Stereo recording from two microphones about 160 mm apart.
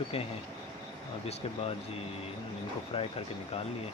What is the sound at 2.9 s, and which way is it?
Speech, 40° left (ahead or behind).